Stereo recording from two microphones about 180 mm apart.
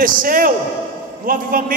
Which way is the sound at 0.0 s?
50° right (ahead or behind).